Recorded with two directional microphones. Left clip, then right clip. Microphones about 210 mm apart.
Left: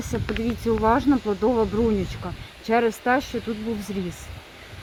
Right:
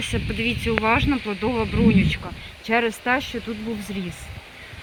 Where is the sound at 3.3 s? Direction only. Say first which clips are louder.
Left 1 dB; 30° left (ahead or behind).